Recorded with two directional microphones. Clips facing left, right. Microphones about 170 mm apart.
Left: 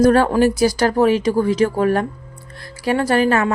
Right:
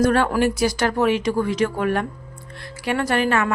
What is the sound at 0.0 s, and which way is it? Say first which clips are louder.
A woman's voice: left 5 dB; 35° left (ahead or behind).